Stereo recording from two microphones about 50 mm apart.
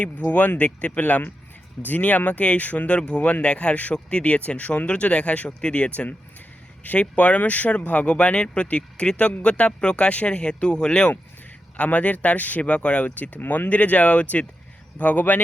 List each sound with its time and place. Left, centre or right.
0.0 s speech: left